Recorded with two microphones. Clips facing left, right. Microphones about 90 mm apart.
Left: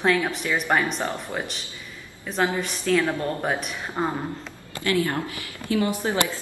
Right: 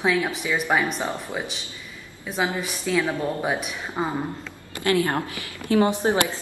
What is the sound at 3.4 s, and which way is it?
Speech, 5° right (ahead or behind).